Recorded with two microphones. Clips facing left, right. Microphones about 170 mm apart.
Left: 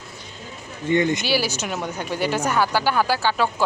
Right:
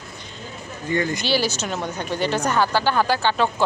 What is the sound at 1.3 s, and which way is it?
Speech, 10° left (ahead or behind).